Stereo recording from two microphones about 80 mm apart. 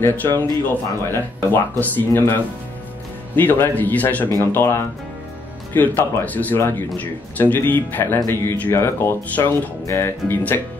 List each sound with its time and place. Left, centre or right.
0.0 s speech: left
8.7 s speech: left